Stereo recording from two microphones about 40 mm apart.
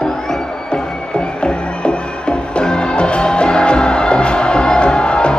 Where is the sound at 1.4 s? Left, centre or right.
Left.